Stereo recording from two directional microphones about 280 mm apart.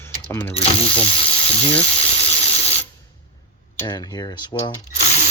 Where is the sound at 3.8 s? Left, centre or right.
Centre.